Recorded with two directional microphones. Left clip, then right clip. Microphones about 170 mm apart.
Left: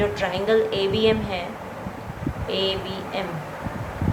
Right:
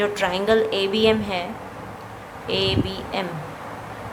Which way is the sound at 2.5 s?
30° right (ahead or behind).